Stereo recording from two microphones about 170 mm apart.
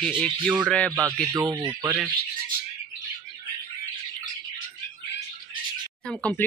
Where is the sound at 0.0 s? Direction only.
5° left (ahead or behind).